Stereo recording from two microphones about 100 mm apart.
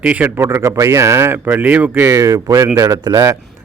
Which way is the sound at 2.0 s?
35° right (ahead or behind).